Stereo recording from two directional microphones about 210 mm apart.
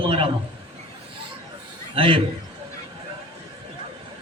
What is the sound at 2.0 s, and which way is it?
Speech, 25° right (ahead or behind).